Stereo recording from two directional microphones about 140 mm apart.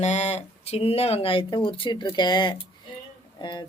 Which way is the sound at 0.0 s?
55° left (ahead or behind).